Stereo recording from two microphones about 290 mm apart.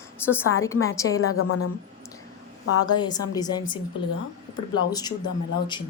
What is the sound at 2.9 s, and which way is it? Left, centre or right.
Speech, centre.